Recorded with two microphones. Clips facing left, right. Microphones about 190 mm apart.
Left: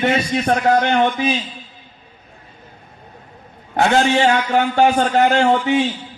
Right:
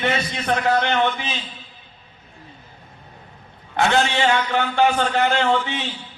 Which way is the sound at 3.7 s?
35° left (ahead or behind).